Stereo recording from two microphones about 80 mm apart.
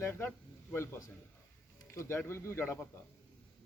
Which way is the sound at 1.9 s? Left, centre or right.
Left.